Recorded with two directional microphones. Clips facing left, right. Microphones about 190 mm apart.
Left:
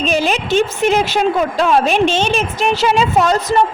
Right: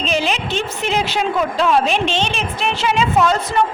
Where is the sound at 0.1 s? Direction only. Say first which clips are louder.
Left 4 dB; 45° left (ahead or behind).